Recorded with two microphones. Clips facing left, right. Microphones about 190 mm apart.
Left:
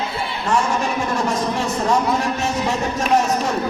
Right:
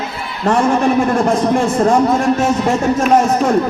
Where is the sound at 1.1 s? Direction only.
50° right (ahead or behind).